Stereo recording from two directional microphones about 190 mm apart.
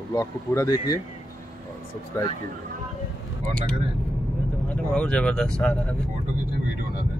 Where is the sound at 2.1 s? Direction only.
15° left (ahead or behind).